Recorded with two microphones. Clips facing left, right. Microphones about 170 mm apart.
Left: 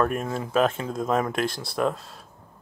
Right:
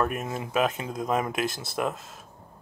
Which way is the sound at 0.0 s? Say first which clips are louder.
Left 3 dB; 5° right (ahead or behind).